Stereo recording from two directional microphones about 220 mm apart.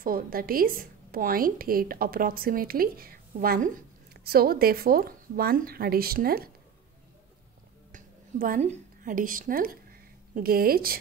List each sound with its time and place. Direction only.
0.0 s a woman's voice: 40° right (ahead or behind)
7.9 s a woman's voice: 35° right (ahead or behind)